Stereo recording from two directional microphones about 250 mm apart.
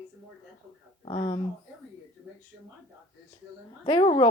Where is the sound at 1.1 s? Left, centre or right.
Centre.